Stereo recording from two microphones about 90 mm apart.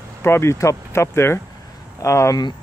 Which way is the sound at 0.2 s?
25° left (ahead or behind).